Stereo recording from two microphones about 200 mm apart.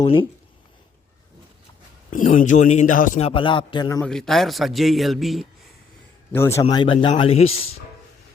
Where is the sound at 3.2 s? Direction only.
25° left (ahead or behind).